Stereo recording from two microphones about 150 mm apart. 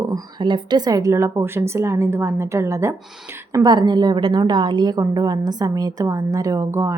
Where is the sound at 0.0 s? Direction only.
25° right (ahead or behind).